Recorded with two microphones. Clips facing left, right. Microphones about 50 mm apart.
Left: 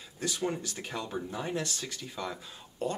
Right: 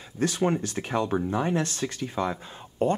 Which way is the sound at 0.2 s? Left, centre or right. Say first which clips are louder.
Right 8 dB; right.